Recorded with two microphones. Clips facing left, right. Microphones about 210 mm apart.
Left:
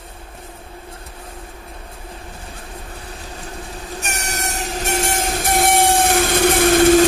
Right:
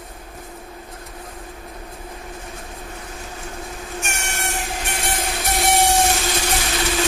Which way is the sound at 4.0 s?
40° left (ahead or behind).